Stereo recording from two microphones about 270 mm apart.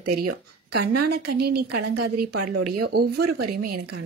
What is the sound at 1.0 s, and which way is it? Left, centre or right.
Speech, right.